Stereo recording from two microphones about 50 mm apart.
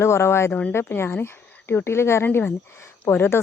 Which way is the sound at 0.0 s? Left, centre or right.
Left.